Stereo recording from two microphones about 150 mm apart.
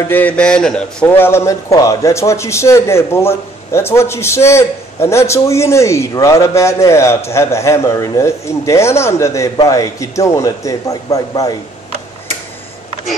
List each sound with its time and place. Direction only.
0.1 s a man's voice: 10° left (ahead or behind)